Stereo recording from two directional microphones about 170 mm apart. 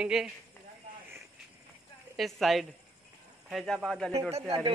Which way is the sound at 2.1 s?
Centre (ahead or behind).